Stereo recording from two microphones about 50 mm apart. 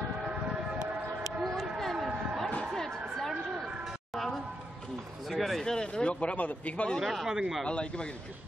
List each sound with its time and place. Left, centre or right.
1.4 s a sound: centre
5.4 s speech: centre; by 7.0 s left
7.0 s speech: centre
7.2 s speech: centre
7.6 s a man's voice: left